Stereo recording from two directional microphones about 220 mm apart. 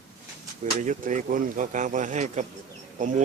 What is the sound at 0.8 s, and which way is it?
Speech, 35° right (ahead or behind).